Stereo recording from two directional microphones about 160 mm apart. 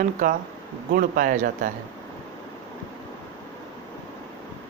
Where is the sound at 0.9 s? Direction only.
55° right (ahead or behind).